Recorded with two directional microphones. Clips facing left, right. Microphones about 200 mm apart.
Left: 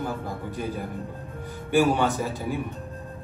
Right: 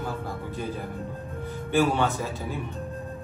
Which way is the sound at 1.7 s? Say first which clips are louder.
Left 2 dB; 15° left (ahead or behind).